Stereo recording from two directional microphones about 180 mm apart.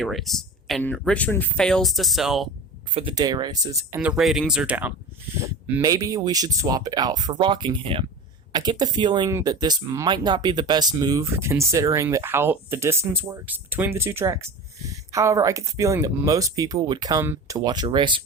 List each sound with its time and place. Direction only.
0.0 s speech: centre (ahead or behind)
2.9 s speech: 30° right (ahead or behind)
4.0 s speech: 5° right (ahead or behind)
5.8 s speech: 20° right (ahead or behind)